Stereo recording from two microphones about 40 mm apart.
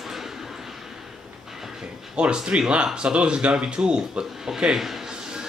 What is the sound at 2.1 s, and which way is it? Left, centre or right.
A man's voice, right.